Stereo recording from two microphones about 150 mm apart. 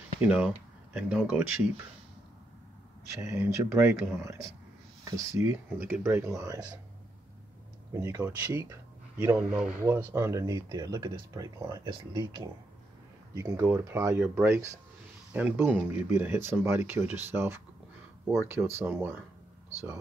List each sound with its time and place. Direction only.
0.2 s speech: 5° right (ahead or behind)
3.2 s speech: 20° right (ahead or behind)
7.9 s speech: 20° right (ahead or behind)
13.3 s speech: 20° right (ahead or behind)
18.6 s speech: 10° right (ahead or behind)